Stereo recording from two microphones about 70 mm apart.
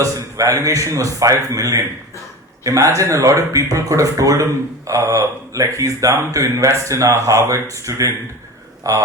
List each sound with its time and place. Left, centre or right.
0.0 s a man's voice: right
4.4 s a man's voice: right